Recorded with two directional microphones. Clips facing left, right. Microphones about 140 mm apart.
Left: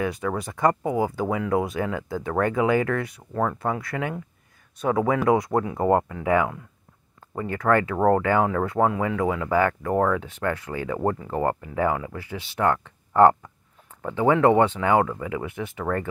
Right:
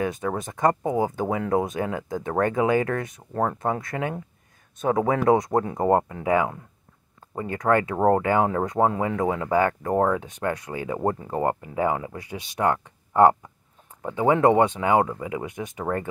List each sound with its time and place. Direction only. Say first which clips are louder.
0.0 s speech: even; 20° right (ahead or behind)
9.8 s speech: even; 40° right (ahead or behind)
10.1 s speech: even; 20° right (ahead or behind)